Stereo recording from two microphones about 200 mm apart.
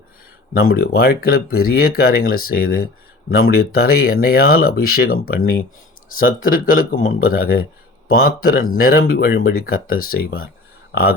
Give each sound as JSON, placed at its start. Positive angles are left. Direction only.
{"t": 0.5, "sound": "speech", "side_deg": 50}